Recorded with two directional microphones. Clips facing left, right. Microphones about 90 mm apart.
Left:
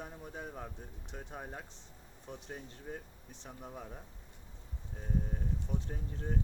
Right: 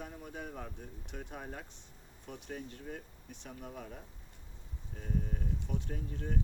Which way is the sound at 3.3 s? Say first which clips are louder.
Right 1 dB; 25° left (ahead or behind).